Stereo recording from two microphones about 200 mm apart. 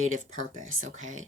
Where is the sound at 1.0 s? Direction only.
35° right (ahead or behind).